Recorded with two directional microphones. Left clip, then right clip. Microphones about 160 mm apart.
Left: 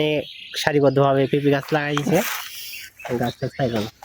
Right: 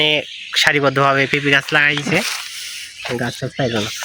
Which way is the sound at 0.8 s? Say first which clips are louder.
Right 2 dB; 20° left (ahead or behind).